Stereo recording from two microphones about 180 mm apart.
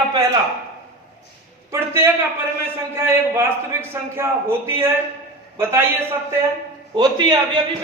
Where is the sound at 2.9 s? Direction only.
15° right (ahead or behind).